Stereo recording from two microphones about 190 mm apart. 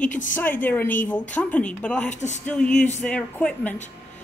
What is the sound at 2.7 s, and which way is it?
Speech, 40° left (ahead or behind).